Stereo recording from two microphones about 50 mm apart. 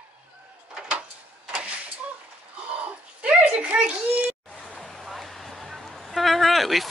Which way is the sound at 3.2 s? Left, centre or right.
Right.